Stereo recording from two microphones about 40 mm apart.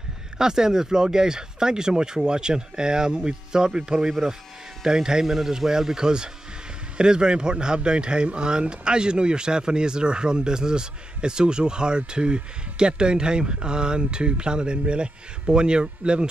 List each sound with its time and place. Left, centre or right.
0.4 s a man's voice: centre